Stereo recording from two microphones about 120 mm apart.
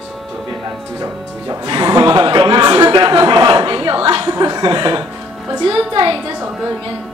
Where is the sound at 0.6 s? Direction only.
30° right (ahead or behind); by 4.2 s 45° right (ahead or behind).